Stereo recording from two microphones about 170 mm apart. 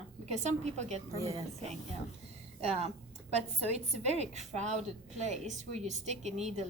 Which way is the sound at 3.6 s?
40° right (ahead or behind).